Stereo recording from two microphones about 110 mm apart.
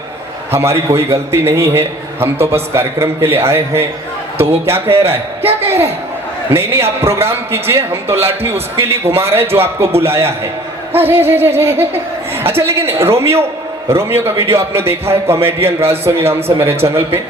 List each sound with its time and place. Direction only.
0.5 s a man's voice: 25° right (ahead or behind)